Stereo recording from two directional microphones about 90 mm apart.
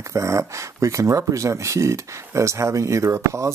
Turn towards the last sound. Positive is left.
turn(degrees=-35)  # may be behind; listen again after turning